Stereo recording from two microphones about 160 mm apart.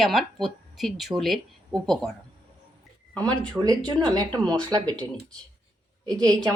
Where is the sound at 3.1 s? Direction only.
5° left (ahead or behind).